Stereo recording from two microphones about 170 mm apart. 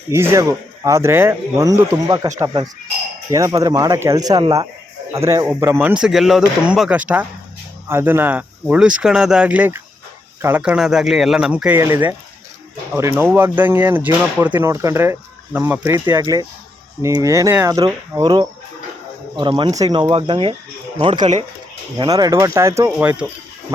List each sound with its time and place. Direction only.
0.1 s speech: 15° right (ahead or behind)